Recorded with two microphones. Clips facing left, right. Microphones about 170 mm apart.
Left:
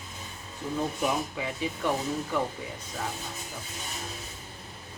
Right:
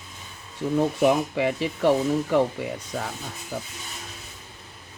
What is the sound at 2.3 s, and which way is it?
Speech, 90° right.